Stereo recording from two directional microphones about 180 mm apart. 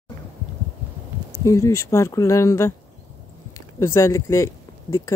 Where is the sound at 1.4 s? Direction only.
15° left (ahead or behind).